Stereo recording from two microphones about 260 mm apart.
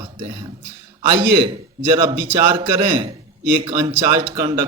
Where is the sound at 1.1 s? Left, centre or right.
Right.